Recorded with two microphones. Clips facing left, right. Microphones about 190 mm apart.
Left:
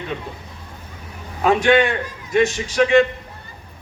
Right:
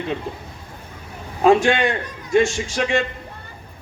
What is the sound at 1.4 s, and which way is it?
A man's voice, 30° right (ahead or behind).